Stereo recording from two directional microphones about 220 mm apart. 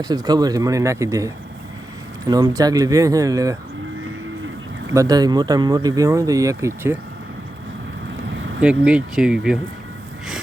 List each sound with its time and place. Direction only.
0.0 s speech: 15° right (ahead or behind)
4.9 s speech: 15° right (ahead or behind)
8.6 s speech: 5° right (ahead or behind)